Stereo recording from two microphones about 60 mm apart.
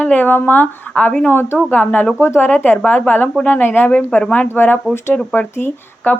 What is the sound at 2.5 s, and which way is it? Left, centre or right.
A woman's voice, left.